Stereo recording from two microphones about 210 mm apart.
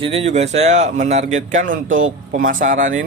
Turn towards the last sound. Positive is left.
turn(degrees=-40)  # may be behind; listen again after turning